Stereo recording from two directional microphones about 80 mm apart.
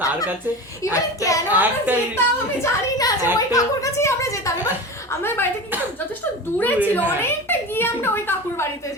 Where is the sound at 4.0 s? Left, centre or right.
Left.